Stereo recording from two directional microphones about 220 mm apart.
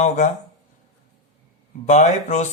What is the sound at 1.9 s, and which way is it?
Speech, 30° left (ahead or behind).